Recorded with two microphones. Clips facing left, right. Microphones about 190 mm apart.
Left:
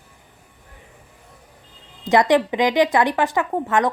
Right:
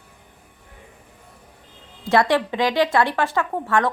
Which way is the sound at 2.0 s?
20° left (ahead or behind).